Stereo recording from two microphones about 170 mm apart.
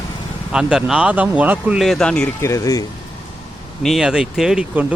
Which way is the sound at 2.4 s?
20° left (ahead or behind).